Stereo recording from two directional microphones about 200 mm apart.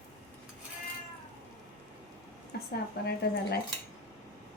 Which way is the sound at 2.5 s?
50° left (ahead or behind).